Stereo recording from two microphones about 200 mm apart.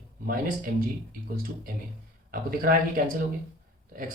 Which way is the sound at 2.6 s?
45° right (ahead or behind).